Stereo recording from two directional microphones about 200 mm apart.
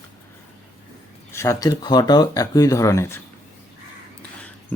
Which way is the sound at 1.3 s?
15° left (ahead or behind).